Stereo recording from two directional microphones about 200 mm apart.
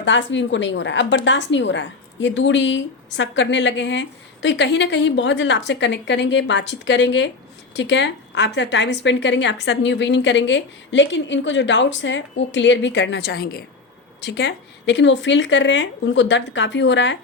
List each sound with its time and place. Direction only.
0.0 s a woman's voice: 65° left (ahead or behind)